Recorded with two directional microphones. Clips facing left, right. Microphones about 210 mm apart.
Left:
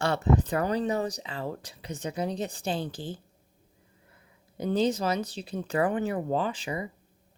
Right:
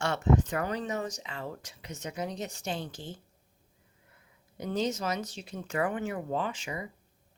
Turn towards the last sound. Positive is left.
turn(degrees=35)  # may be behind; listen again after turning